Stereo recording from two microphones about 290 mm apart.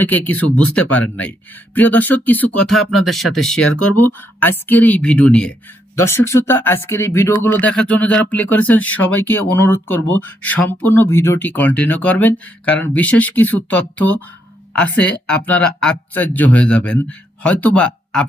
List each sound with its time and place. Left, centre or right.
0.0 s speech: centre
3.7 s speech: left
4.0 s speech: centre